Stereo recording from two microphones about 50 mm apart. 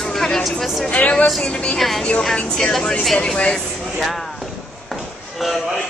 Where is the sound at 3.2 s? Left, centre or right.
Centre.